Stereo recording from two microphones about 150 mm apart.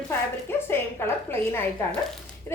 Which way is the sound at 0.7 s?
15° left (ahead or behind).